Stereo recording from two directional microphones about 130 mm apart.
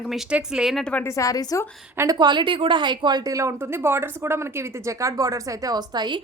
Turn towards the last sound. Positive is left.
turn(degrees=-35)  # may be behind; listen again after turning